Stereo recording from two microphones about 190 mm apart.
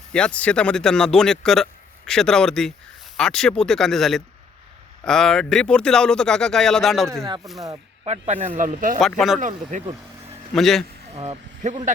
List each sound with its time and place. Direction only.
0.1 s speech: 5° left (ahead or behind)
7.1 s speech: 20° right (ahead or behind)
8.3 s speech: 40° right (ahead or behind)
9.0 s speech: centre (ahead or behind)
9.4 s speech: 40° right (ahead or behind)
10.5 s speech: centre (ahead or behind)
11.1 s speech: 35° right (ahead or behind)